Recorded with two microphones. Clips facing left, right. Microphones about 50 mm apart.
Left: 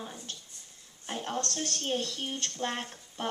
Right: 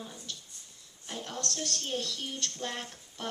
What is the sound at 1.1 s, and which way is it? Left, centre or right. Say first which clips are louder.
Speech: left 4 dB; left.